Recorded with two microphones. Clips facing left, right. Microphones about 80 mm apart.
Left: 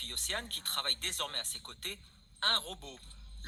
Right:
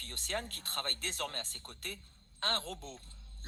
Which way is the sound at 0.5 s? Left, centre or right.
Left.